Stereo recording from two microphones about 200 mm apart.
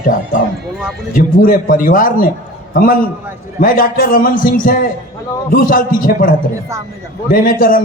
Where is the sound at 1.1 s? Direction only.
45° left (ahead or behind).